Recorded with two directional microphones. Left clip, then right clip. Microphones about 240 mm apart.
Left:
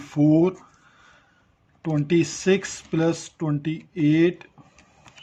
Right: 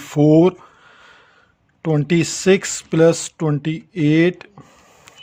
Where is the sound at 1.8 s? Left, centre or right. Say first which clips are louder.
Right 4 dB; right.